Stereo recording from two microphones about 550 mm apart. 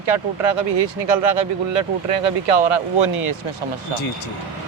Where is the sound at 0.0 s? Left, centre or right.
Right.